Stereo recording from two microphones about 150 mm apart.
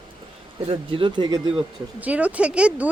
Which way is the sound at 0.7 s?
35° right (ahead or behind).